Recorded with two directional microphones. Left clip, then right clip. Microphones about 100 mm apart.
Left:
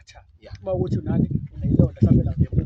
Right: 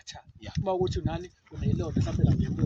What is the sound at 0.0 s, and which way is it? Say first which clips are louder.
Speech: right 2 dB; 50° left (ahead or behind).